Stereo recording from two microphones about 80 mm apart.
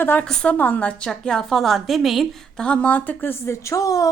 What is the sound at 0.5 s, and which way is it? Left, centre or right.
A woman's voice, left.